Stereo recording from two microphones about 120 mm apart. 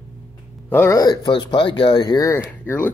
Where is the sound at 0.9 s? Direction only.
30° left (ahead or behind).